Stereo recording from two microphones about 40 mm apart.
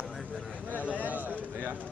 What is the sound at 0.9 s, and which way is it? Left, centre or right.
Speech, right.